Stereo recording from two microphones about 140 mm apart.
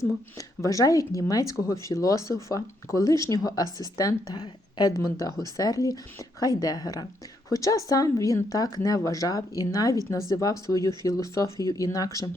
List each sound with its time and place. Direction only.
0.3 s speech: 25° left (ahead or behind)